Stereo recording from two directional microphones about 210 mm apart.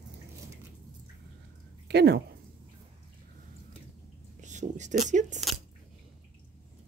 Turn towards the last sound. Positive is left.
turn(degrees=-35)  # may be behind; listen again after turning